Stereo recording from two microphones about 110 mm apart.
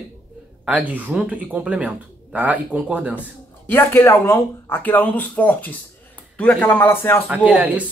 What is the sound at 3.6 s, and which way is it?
Speech, 20° left (ahead or behind).